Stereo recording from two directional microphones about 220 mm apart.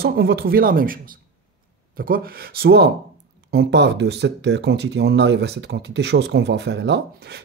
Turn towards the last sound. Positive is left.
turn(degrees=-50)  # may be behind; listen again after turning